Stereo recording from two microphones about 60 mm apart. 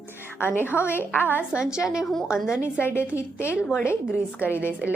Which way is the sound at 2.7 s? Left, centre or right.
Left.